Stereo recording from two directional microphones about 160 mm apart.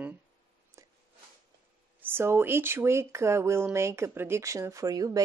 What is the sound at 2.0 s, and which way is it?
Speech, 15° right (ahead or behind).